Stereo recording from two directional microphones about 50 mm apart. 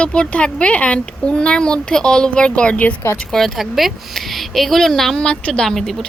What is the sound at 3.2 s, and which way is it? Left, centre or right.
Speech, centre.